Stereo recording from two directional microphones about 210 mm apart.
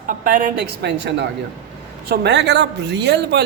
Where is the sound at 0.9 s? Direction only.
55° right (ahead or behind).